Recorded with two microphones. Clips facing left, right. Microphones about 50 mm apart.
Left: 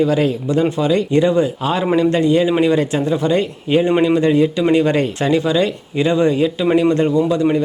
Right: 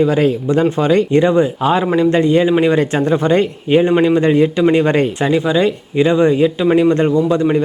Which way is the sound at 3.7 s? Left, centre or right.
Centre.